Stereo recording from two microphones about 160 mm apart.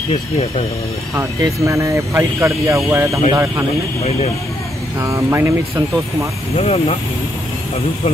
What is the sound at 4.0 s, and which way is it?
Speech, 40° left (ahead or behind).